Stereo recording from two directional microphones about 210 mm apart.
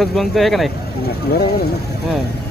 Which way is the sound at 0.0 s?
Centre (ahead or behind).